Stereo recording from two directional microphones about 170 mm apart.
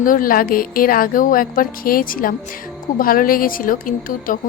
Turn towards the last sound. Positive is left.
turn(degrees=50)  # may be behind; listen again after turning